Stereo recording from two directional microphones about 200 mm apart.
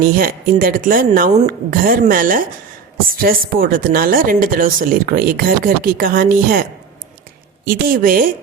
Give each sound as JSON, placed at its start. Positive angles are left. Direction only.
{"t": 0.0, "sound": "speech", "side_deg": -45}